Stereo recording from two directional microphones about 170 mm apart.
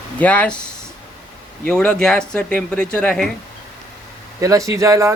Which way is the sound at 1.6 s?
5° left (ahead or behind).